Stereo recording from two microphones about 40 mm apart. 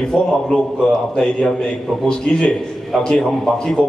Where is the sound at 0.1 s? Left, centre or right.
Centre.